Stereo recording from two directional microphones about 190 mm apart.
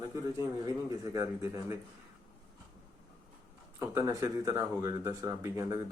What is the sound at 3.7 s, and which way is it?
Speech, 15° right (ahead or behind).